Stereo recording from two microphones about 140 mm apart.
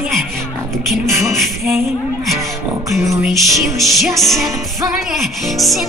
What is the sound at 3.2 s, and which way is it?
Music, centre (ahead or behind).